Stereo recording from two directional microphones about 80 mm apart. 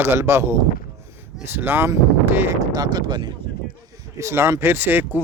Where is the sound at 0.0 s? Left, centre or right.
Right.